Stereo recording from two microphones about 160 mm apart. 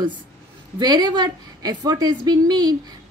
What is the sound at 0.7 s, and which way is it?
A woman's voice, 25° right (ahead or behind).